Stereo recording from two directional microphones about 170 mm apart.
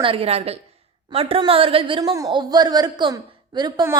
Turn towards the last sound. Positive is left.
turn(degrees=-20)  # may be behind; listen again after turning